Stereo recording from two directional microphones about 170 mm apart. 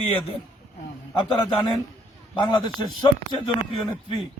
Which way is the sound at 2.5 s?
30° left (ahead or behind).